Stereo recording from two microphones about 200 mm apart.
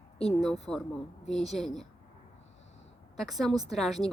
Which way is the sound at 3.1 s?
Centre (ahead or behind).